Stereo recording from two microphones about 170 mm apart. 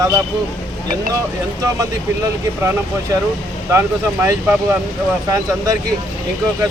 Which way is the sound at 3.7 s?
15° right (ahead or behind).